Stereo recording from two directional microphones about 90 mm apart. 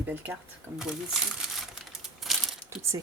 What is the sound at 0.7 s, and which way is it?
Speech, 5° right (ahead or behind).